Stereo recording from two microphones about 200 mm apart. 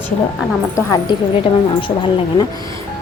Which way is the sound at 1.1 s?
25° left (ahead or behind).